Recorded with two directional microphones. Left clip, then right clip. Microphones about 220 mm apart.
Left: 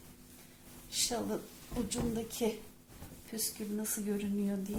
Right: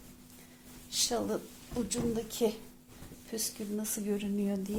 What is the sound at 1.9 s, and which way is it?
A woman's voice, 30° right (ahead or behind).